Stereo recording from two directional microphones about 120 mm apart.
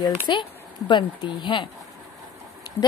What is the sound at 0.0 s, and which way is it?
A woman's voice, 40° left (ahead or behind).